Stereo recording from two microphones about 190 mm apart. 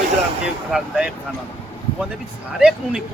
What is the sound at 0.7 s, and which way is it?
Speech, 5° right (ahead or behind).